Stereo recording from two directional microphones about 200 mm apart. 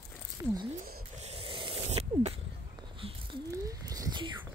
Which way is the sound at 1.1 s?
30° right (ahead or behind).